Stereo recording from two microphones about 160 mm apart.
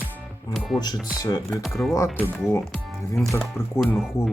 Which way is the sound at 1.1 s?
25° left (ahead or behind).